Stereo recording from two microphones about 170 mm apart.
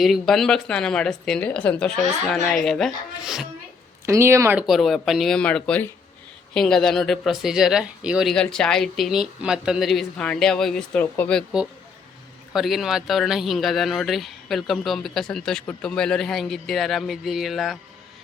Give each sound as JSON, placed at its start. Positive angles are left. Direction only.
{"t": 0.0, "sound": "speech", "side_deg": 0}
{"t": 4.0, "sound": "speech", "side_deg": -15}
{"t": 4.6, "sound": "speech", "side_deg": 0}
{"t": 12.5, "sound": "speech", "side_deg": 0}